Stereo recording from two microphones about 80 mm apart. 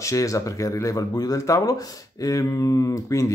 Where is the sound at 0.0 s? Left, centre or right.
Left.